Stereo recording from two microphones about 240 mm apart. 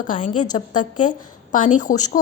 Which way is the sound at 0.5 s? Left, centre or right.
Left.